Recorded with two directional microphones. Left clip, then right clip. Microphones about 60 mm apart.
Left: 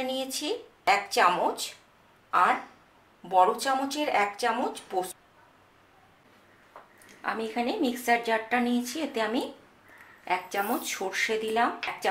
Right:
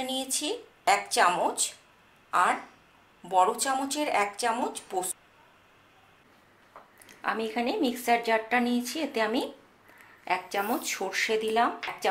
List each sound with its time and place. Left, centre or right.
0.0 s speech: centre
7.1 s a woman's voice: right
11.7 s speech: centre